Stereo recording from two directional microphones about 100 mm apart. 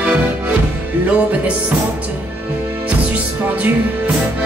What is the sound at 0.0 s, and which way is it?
Music, 10° right (ahead or behind).